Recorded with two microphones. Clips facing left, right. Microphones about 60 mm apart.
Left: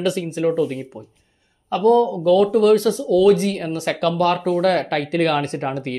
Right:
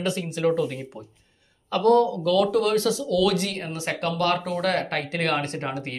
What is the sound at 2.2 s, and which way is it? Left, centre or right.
Speech, left.